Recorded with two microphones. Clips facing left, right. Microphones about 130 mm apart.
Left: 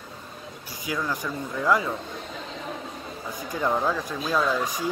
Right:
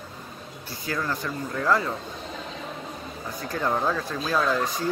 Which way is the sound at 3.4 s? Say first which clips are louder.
Left 1 dB; 15° left (ahead or behind).